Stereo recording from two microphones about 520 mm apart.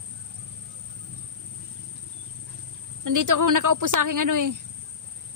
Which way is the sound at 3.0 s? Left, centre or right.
Right.